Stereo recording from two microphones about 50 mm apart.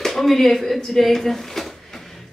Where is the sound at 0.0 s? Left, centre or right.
Centre.